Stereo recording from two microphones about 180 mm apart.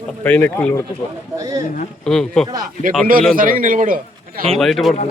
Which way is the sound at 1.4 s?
20° right (ahead or behind).